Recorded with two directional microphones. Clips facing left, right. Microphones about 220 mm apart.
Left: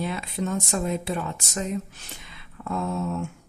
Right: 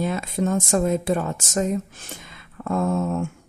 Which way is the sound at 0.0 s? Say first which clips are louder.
Right 5 dB; 45° right (ahead or behind).